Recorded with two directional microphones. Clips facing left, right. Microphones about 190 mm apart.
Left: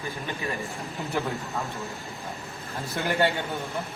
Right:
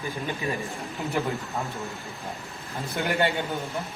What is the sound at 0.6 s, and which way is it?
A man's voice, centre (ahead or behind).